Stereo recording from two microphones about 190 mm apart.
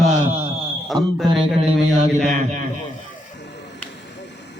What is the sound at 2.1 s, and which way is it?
Speech, 40° right (ahead or behind).